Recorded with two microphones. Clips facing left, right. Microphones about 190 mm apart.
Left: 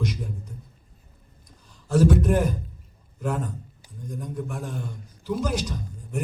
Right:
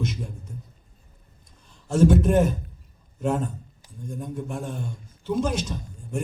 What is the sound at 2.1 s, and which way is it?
A man's voice, 25° right (ahead or behind).